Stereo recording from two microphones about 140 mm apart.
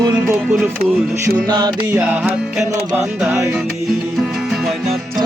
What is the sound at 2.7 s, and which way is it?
Music, 25° right (ahead or behind).